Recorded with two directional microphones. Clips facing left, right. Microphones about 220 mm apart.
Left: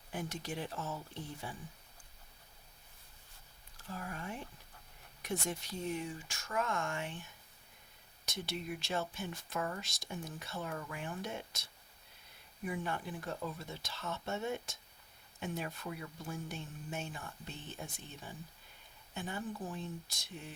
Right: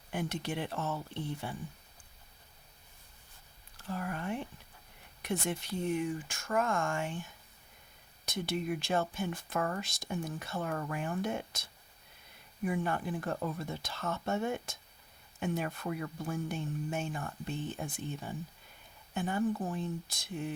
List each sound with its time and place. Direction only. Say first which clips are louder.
0.1 s speech: right 5 dB; 65° right (ahead or behind)
3.8 s speech: right 7 dB; 65° right (ahead or behind)